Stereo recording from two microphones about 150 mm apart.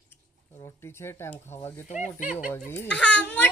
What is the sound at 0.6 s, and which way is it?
Speech, 15° left (ahead or behind).